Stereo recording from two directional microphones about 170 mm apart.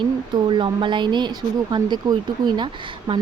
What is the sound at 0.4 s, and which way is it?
Speech, 30° right (ahead or behind).